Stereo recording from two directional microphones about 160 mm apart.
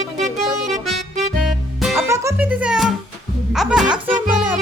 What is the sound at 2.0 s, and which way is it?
Music, 20° right (ahead or behind).